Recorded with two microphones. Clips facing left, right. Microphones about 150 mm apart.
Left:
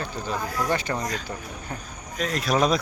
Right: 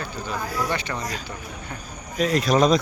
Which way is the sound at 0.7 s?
40° left (ahead or behind).